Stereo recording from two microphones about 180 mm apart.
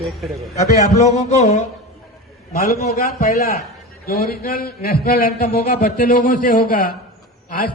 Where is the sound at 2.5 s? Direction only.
55° left (ahead or behind).